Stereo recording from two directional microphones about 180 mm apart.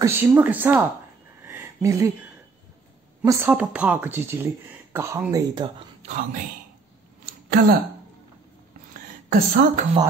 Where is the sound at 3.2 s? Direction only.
10° right (ahead or behind).